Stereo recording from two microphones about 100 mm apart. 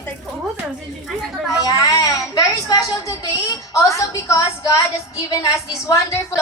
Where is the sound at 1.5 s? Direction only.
40° left (ahead or behind).